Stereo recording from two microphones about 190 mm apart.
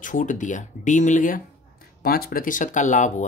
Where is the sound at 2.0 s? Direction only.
50° left (ahead or behind).